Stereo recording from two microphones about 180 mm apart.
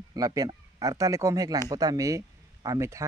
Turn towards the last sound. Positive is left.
turn(degrees=-15)  # may be behind; listen again after turning